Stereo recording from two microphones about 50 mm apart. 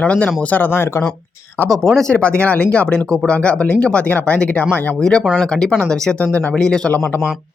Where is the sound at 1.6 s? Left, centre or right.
Centre.